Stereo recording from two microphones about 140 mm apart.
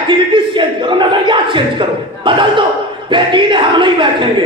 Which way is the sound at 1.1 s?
35° right (ahead or behind).